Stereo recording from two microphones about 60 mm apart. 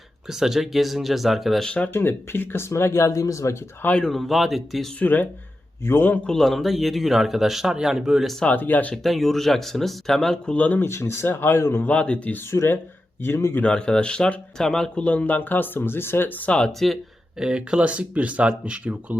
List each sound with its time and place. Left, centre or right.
0.3 s speech: centre
1.8 s speech: left
4.0 s speech: centre
4.9 s speech: left
6.2 s speech: centre
8.4 s speech: left
9.0 s speech: centre; by 10.8 s left
10.8 s speech: left
11.9 s speech: centre
12.5 s speech: left
13.6 s speech: centre
15.0 s speech: left
16.5 s speech: centre
17.4 s speech: centre